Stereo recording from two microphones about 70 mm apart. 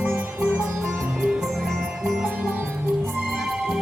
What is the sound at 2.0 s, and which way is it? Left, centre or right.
Music, centre.